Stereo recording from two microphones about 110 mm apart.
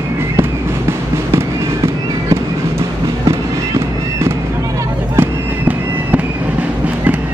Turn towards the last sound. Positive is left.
turn(degrees=-15)  # may be behind; listen again after turning